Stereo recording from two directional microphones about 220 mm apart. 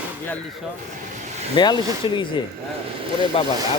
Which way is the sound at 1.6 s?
20° left (ahead or behind).